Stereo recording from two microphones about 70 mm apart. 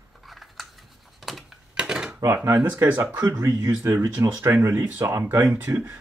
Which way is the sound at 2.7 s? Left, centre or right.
Right.